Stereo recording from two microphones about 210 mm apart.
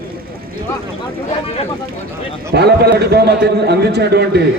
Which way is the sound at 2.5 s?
50° right (ahead or behind).